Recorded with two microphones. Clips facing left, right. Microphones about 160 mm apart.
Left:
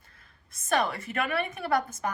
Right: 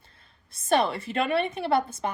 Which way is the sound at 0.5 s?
30° right (ahead or behind).